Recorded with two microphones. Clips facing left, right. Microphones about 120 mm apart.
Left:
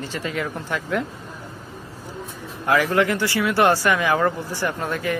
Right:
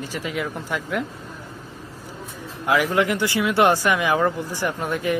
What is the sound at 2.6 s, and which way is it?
Speech, 15° right (ahead or behind).